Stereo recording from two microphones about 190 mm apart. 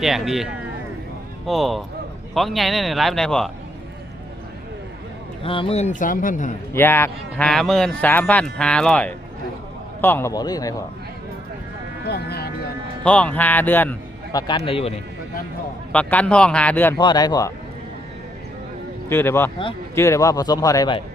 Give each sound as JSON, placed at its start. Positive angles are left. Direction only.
{"t": 0.0, "sound": "speech", "side_deg": 0}
{"t": 1.5, "sound": "speech", "side_deg": 0}
{"t": 5.4, "sound": "a man's voice", "side_deg": 30}
{"t": 6.7, "sound": "a man's voice", "side_deg": 10}
{"t": 12.0, "sound": "speech", "side_deg": 60}
{"t": 13.1, "sound": "a man's voice", "side_deg": 5}
{"t": 14.3, "sound": "a man's voice", "side_deg": 25}
{"t": 15.9, "sound": "a man's voice", "side_deg": 5}
{"t": 17.0, "sound": "a man's voice", "side_deg": 20}
{"t": 19.0, "sound": "a man's voice", "side_deg": 10}